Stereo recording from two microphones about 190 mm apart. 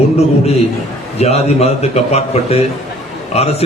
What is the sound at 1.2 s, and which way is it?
A man's voice, 35° left (ahead or behind).